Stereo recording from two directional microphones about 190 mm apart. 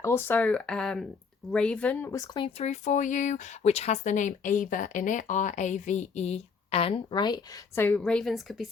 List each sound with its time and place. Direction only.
0.0 s speech: 10° left (ahead or behind)